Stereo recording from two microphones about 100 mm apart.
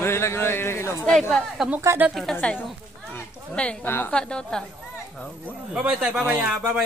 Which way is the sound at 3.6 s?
10° left (ahead or behind).